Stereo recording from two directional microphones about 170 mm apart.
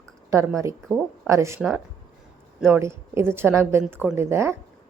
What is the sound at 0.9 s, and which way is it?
Speech, 15° right (ahead or behind).